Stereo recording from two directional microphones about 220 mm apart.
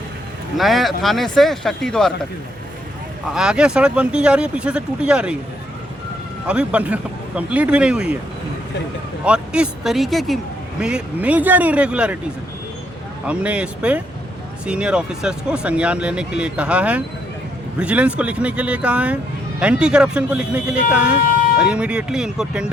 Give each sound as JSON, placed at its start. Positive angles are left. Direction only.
{"t": 0.5, "sound": "speech", "side_deg": 0}
{"t": 3.3, "sound": "speech", "side_deg": -5}
{"t": 6.5, "sound": "speech", "side_deg": -5}
{"t": 9.2, "sound": "speech", "side_deg": -5}
{"t": 13.2, "sound": "speech", "side_deg": -5}